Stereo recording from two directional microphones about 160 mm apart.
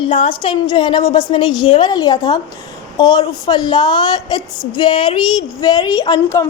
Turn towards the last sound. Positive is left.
turn(degrees=25)  # may be behind; listen again after turning